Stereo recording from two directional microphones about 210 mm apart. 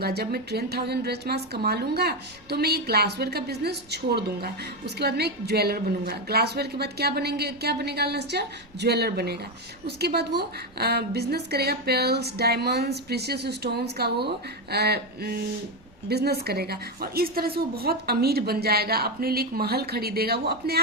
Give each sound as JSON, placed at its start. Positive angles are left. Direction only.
{"t": 0.0, "sound": "a woman's voice", "side_deg": -50}